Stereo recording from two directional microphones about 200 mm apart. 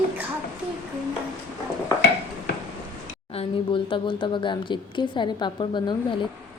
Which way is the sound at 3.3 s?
25° left (ahead or behind).